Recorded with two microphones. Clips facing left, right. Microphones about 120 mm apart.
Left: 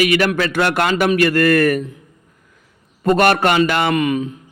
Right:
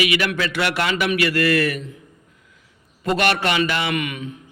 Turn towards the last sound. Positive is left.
turn(degrees=35)  # may be behind; listen again after turning